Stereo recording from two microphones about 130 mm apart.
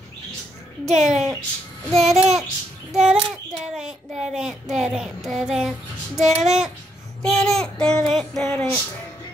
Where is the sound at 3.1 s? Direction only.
40° right (ahead or behind).